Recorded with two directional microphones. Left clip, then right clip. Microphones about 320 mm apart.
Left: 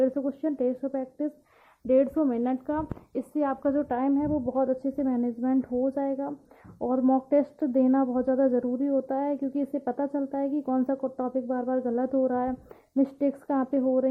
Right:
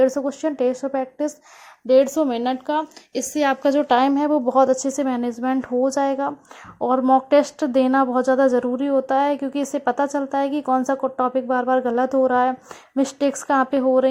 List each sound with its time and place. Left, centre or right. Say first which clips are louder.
0.0 s a woman's voice: right 7 dB; centre